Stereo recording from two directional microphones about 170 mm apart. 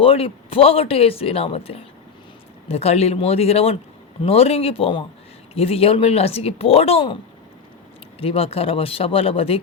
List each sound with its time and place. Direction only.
0.0 s speech: 35° left (ahead or behind)
8.2 s speech: 35° left (ahead or behind)